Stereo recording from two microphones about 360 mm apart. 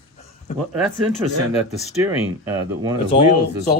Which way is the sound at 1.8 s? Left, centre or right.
Centre.